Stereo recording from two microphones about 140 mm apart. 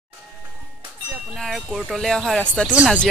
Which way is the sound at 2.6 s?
10° right (ahead or behind).